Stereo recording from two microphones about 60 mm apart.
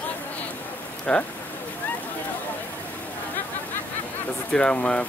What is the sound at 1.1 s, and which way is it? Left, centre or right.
Speech, centre.